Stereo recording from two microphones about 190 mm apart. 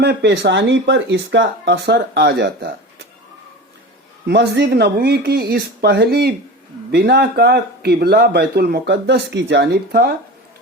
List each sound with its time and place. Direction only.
0.0 s speech: 60° right (ahead or behind)
4.3 s speech: 65° right (ahead or behind)